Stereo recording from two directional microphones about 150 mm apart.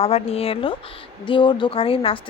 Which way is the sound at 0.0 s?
40° left (ahead or behind).